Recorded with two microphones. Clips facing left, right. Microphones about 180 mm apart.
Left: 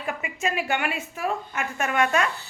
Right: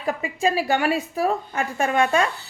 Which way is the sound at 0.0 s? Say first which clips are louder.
Right 6 dB; 35° right (ahead or behind).